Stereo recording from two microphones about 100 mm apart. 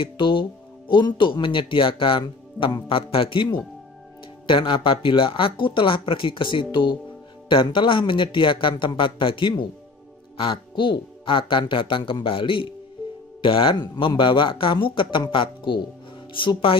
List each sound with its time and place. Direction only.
0.0 s speech: 55° left (ahead or behind)